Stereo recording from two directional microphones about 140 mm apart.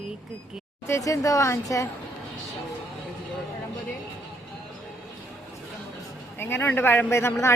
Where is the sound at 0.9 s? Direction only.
25° left (ahead or behind).